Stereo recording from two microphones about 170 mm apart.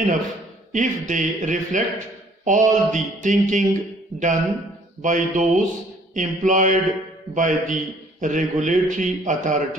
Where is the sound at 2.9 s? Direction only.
45° right (ahead or behind).